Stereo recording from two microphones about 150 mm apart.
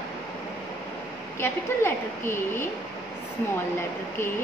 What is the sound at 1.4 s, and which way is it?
A woman's voice, 15° left (ahead or behind).